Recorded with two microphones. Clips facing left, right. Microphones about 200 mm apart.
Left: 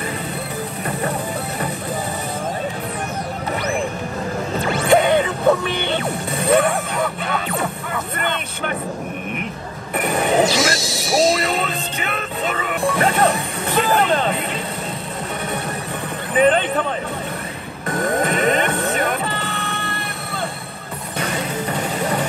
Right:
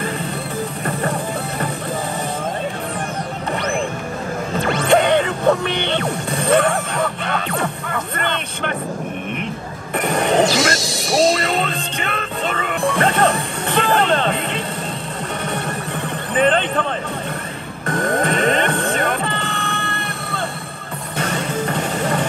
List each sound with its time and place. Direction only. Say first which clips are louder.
4.8 s music: even; 5° left (ahead or behind)
6.0 s music: right 1 dB; 25° right (ahead or behind)
9.9 s speech: right 1 dB; 5° left (ahead or behind)
13.7 s music: even; 5° left (ahead or behind)
16.3 s speech: left 1 dB; 10° left (ahead or behind)
18.2 s a sound: even; 5° left (ahead or behind)